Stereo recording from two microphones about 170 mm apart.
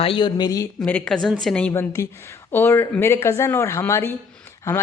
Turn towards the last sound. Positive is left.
turn(degrees=15)  # may be behind; listen again after turning